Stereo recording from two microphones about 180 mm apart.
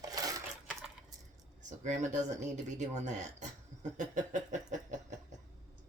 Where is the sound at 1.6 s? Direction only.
40° right (ahead or behind).